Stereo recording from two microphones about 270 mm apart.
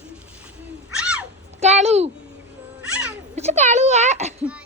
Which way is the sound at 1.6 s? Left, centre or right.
Right.